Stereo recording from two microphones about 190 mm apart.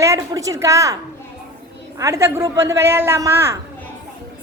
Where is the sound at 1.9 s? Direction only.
15° right (ahead or behind).